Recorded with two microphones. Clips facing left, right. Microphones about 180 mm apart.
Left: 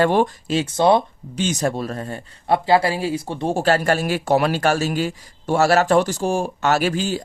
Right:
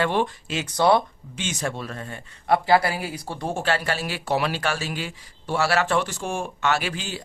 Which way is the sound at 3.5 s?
40° left (ahead or behind).